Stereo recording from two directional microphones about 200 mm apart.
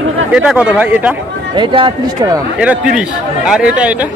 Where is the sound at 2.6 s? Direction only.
5° right (ahead or behind).